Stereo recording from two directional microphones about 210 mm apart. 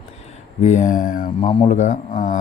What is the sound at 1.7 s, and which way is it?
Speech, 35° left (ahead or behind).